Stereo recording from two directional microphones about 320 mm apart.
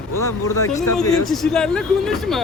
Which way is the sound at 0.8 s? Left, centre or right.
Centre.